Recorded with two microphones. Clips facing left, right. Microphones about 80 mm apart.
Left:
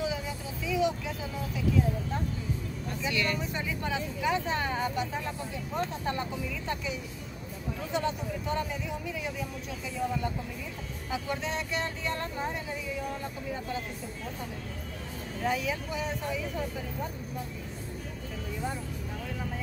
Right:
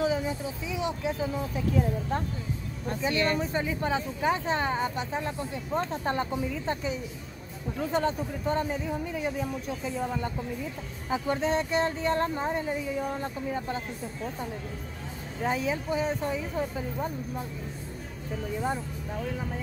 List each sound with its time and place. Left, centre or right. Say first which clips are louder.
0.7 s vehicle: left 2 dB; right
1.5 s speech: left 3 dB; right
2.9 s speech: right 5 dB; right
15.4 s speech: right 2 dB; right